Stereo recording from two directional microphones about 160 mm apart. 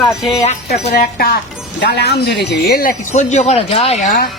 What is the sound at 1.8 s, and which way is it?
Speech, 90° left.